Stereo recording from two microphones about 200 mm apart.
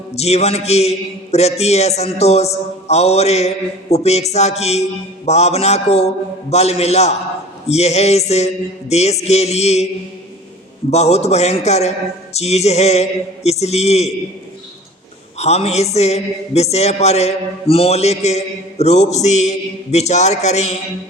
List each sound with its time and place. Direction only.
0.1 s a man's voice: 30° left (ahead or behind)
10.9 s a man's voice: 30° left (ahead or behind)
15.4 s a man's voice: 30° left (ahead or behind)